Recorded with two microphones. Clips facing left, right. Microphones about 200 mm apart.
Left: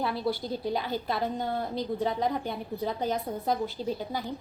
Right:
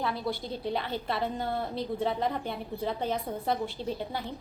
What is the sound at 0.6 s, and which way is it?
A woman's voice, centre (ahead or behind).